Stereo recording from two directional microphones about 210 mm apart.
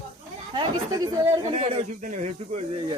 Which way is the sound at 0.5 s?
15° right (ahead or behind).